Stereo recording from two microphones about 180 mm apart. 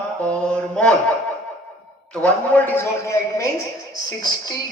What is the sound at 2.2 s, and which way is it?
Speech, 10° left (ahead or behind).